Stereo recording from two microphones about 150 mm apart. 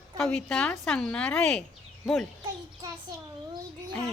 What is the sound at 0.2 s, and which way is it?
A woman's voice, 5° left (ahead or behind).